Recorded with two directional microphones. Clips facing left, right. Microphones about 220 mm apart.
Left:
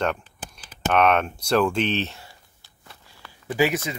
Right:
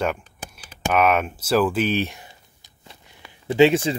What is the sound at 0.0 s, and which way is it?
Speech, 5° right (ahead or behind).